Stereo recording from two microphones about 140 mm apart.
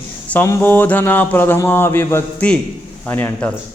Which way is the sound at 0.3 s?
15° left (ahead or behind).